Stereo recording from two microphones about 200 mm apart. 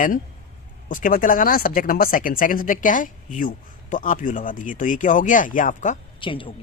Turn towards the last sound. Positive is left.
turn(degrees=25)  # may be behind; listen again after turning